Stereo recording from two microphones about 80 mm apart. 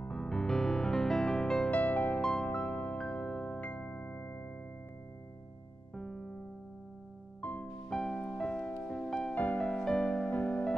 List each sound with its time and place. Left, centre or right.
0.1 s music: centre
1.7 s music: centre
5.9 s music: centre
7.6 s music: centre